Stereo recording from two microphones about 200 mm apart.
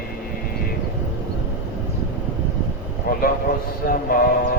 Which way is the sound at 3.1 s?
50° left (ahead or behind).